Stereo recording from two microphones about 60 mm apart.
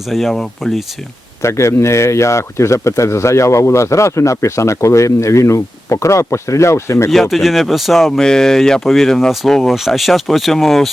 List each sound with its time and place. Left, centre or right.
0.1 s speech: centre
1.4 s speech: left
7.1 s speech: centre
8.2 s speech: centre